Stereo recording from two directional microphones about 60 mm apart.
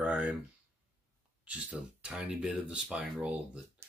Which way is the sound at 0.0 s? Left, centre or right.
Right.